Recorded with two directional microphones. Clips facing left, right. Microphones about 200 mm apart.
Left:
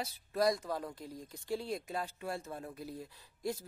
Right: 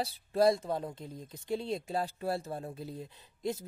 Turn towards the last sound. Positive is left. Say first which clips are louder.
# right 3 dB
turn(degrees=-20)  # may be behind; listen again after turning